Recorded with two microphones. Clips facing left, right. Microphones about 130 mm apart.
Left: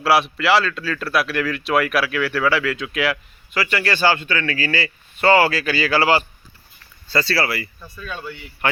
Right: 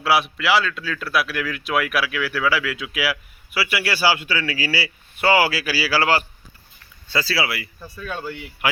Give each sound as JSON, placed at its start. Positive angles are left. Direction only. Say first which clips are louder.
{"t": 0.0, "sound": "speech", "louder": "left 2 dB", "side_deg": 0}
{"t": 7.9, "sound": "speech", "louder": "right 2 dB", "side_deg": -45}
{"t": 8.3, "sound": "speech", "louder": "left 3 dB", "side_deg": 0}